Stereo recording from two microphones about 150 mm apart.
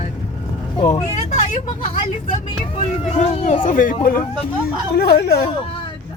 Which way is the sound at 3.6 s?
65° left (ahead or behind).